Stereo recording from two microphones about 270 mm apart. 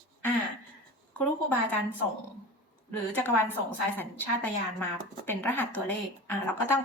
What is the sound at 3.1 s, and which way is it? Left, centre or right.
Speech, centre.